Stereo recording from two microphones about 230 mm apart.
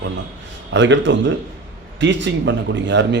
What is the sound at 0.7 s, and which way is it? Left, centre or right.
A man's voice, right.